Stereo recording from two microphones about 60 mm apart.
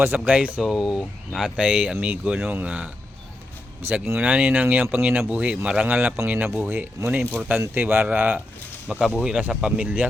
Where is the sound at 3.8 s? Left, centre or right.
Right.